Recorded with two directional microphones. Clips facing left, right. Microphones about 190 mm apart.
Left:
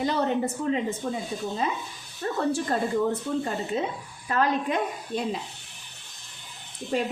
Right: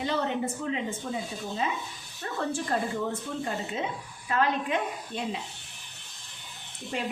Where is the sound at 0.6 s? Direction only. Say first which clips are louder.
Left 5 dB; 40° left (ahead or behind).